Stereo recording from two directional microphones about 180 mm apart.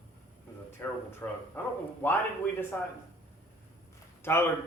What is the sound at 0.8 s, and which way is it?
Speech, 15° left (ahead or behind).